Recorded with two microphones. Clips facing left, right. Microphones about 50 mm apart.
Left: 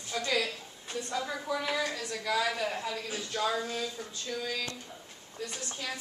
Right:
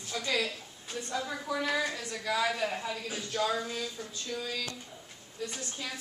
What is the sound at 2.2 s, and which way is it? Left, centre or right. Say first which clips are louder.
A woman's voice: even; centre.